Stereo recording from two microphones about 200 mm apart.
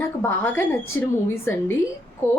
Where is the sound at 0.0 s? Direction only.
10° left (ahead or behind).